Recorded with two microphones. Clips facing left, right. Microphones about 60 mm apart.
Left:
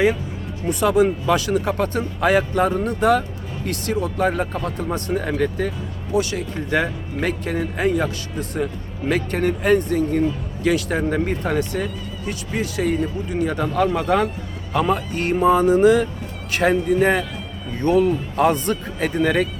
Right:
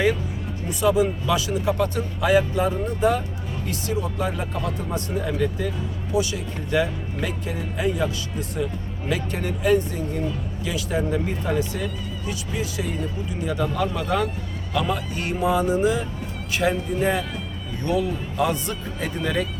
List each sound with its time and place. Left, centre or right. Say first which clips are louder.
0.7 s speech: left 3 dB; left
3.7 s speech: left 4 dB; left
15.8 s a man's voice: left 7 dB; left